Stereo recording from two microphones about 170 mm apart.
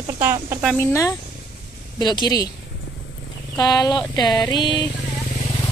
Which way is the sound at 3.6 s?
25° left (ahead or behind).